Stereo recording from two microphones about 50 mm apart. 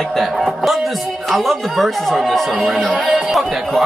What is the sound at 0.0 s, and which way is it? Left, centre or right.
A man's voice, centre.